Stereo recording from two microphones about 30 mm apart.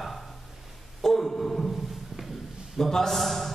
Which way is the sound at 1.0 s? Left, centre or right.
Centre.